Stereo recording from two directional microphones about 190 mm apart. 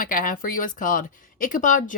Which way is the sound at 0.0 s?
45° left (ahead or behind).